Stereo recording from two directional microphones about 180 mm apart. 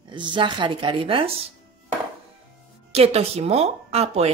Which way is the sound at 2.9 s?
35° right (ahead or behind).